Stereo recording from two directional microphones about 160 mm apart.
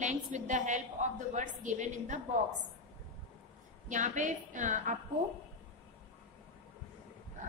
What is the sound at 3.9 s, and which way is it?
A woman's voice, 50° right (ahead or behind).